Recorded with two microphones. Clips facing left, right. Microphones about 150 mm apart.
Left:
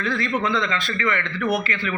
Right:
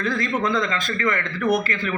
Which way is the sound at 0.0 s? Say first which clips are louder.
Right 1 dB; 45° right (ahead or behind).